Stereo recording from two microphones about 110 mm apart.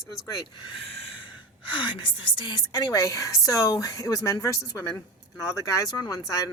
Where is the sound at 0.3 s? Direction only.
45° left (ahead or behind).